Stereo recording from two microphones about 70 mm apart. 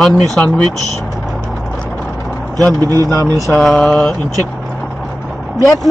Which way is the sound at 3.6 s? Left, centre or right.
Centre.